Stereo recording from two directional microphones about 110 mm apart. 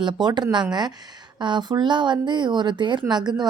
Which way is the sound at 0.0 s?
40° right (ahead or behind).